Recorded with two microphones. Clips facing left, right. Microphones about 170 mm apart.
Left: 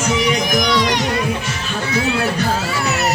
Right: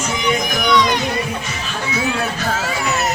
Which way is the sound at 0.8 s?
75° left (ahead or behind).